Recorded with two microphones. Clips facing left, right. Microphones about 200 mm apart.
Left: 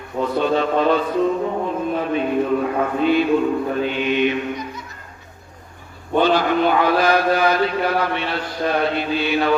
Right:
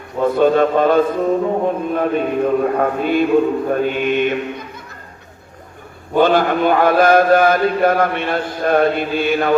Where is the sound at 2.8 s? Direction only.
50° right (ahead or behind).